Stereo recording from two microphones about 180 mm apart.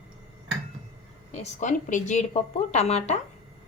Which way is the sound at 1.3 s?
40° left (ahead or behind).